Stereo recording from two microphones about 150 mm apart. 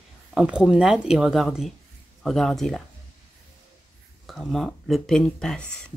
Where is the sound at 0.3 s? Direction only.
5° right (ahead or behind).